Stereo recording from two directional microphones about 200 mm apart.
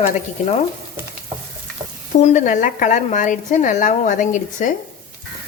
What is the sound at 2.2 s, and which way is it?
A woman's voice, 35° left (ahead or behind).